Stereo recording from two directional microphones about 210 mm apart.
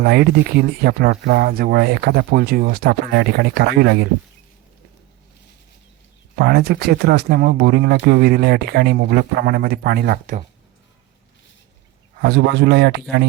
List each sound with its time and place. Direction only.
0.0 s speech: 50° right (ahead or behind)
6.4 s speech: 50° right (ahead or behind)
12.2 s speech: 50° right (ahead or behind)